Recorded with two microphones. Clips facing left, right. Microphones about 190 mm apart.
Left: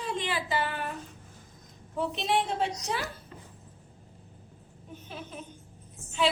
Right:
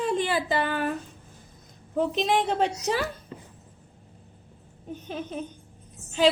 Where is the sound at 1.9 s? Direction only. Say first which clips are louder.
Right 5 dB; 80° right.